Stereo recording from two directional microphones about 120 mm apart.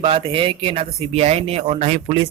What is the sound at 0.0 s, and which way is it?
Speech, 45° right (ahead or behind).